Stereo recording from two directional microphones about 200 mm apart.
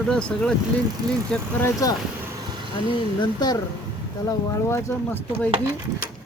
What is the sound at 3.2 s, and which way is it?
Speech, 20° left (ahead or behind).